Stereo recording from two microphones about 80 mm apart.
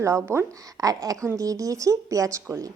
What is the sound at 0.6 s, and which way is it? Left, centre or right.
A woman's voice, right.